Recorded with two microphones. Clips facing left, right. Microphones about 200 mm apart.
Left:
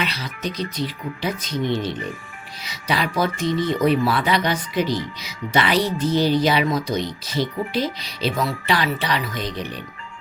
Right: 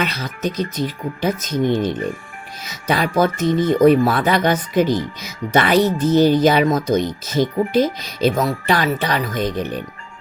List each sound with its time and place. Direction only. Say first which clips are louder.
0.0 s speech: right 5 dB; 45° right (ahead or behind)